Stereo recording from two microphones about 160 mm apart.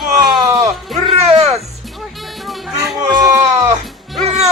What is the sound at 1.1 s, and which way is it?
Speech, 40° right (ahead or behind).